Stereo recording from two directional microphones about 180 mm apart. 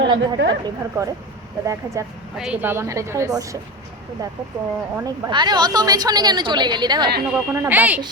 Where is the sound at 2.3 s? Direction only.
5° right (ahead or behind).